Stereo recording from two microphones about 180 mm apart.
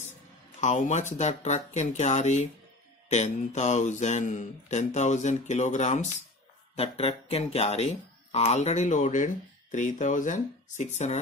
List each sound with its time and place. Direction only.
0.6 s speech: 40° left (ahead or behind)